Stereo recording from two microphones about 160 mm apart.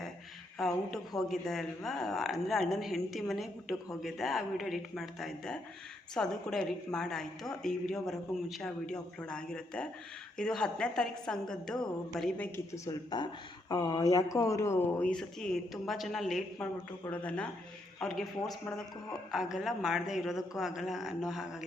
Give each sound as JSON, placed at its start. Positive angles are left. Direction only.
{"t": 0.6, "sound": "a woman's voice", "side_deg": 0}
{"t": 12.5, "sound": "a woman's voice", "side_deg": 20}